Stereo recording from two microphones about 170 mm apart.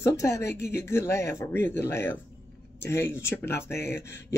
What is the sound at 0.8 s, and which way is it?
Speech, 15° left (ahead or behind).